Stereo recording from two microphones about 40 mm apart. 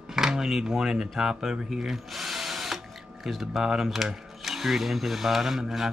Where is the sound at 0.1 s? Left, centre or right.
Centre.